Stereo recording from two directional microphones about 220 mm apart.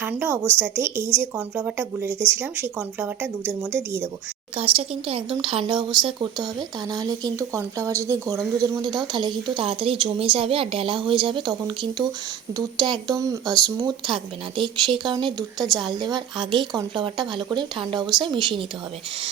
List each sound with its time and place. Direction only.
0.0 s speech: 10° right (ahead or behind)
4.5 s speech: 25° right (ahead or behind)